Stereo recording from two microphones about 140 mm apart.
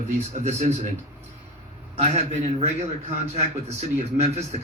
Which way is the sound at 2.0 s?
50° right (ahead or behind).